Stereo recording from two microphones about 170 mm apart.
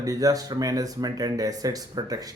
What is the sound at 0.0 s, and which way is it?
Speech, 20° right (ahead or behind).